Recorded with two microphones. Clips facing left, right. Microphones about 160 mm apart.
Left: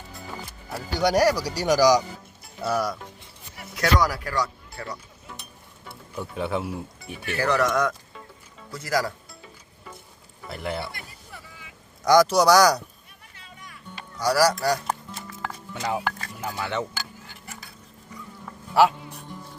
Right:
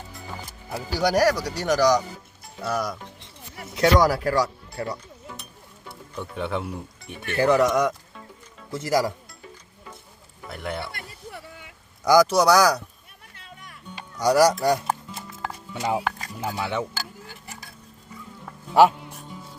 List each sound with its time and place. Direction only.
0.7 s speech: 5° right (ahead or behind)
3.8 s speech: 25° right (ahead or behind)
6.1 s speech: 5° left (ahead or behind)
7.3 s speech: 20° right (ahead or behind)
10.5 s speech: centre (ahead or behind)
12.0 s speech: 5° right (ahead or behind)
13.3 s music: 55° right (ahead or behind)
13.9 s music: 20° right (ahead or behind)
16.5 s speech: 10° right (ahead or behind)
18.7 s speech: 20° right (ahead or behind)